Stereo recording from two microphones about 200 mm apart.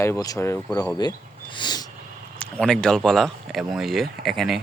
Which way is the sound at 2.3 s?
5° left (ahead or behind).